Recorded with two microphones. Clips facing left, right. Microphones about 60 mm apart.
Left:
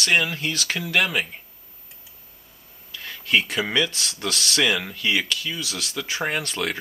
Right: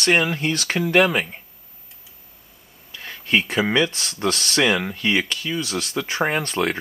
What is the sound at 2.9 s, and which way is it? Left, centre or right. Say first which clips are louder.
Speech: right 1 dB; centre.